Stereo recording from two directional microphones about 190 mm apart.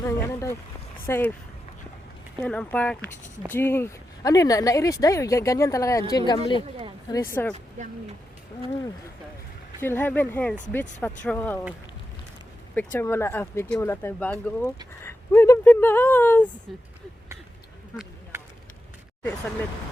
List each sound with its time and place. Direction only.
0.0 s speech: 15° left (ahead or behind)
2.4 s speech: 5° left (ahead or behind)
7.4 s speech: 10° left (ahead or behind)
9.8 s speech: 10° left (ahead or behind)
12.7 s speech: 10° left (ahead or behind)